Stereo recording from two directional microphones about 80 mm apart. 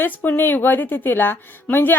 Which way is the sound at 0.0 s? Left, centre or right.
Left.